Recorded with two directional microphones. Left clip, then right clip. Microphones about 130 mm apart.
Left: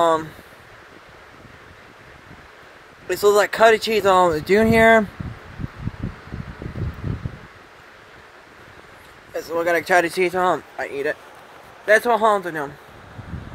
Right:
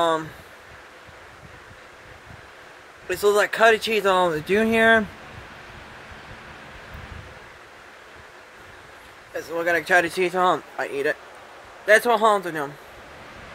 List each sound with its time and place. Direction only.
0.0 s speech: 35° left (ahead or behind)
3.1 s speech: 40° left (ahead or behind)
9.5 s speech: 40° left (ahead or behind)
10.2 s speech: 15° left (ahead or behind)
10.8 s speech: 30° right (ahead or behind)
11.8 s speech: 10° right (ahead or behind)